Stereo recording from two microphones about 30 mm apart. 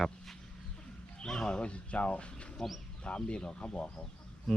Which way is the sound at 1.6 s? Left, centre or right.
Left.